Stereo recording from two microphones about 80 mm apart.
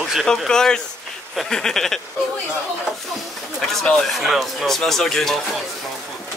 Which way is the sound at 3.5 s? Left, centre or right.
Centre.